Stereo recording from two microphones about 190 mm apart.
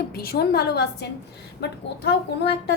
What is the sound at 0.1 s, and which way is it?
A woman's voice, 55° left (ahead or behind).